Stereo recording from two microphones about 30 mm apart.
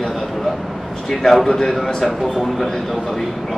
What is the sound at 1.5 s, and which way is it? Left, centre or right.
Speech, centre.